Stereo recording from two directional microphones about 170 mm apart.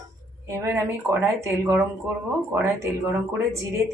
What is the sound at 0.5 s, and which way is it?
Speech, 15° right (ahead or behind).